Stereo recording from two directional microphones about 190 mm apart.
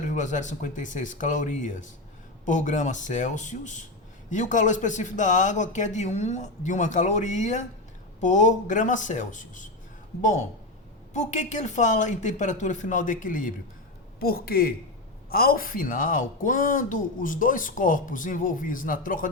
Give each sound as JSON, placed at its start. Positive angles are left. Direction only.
{"t": 0.1, "sound": "speech", "side_deg": 40}